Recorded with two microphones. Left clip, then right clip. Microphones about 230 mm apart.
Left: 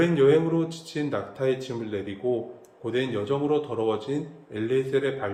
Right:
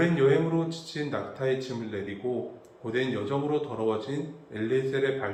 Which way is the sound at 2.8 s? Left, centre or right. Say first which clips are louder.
Left 3 dB; left.